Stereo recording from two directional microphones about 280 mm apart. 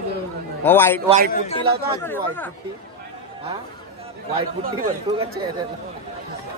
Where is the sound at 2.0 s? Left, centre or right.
Centre.